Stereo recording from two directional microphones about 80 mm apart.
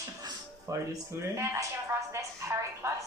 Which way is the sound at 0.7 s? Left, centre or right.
Right.